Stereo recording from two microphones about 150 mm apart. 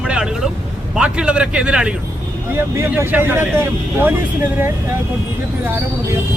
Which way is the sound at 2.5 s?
15° right (ahead or behind).